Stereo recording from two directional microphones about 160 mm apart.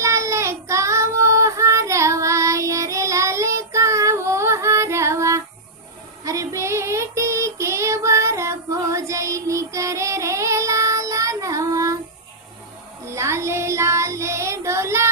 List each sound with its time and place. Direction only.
0.0 s child singing: 20° right (ahead or behind)
13.1 s child singing: 15° right (ahead or behind)